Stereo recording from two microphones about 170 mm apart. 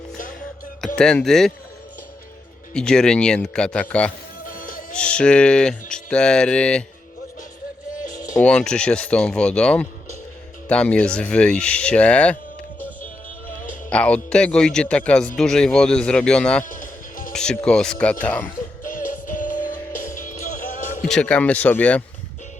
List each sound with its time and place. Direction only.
0.9 s speech: 5° left (ahead or behind)
2.7 s speech: 5° left (ahead or behind)
4.4 s music: 55° left (ahead or behind)
4.9 s speech: 5° left (ahead or behind)
8.4 s speech: 5° left (ahead or behind)
13.9 s speech: 5° left (ahead or behind)
16.6 s music: 50° left (ahead or behind)
17.3 s speech: 5° left (ahead or behind)
18.8 s music: 55° left (ahead or behind)
21.0 s speech: 5° left (ahead or behind)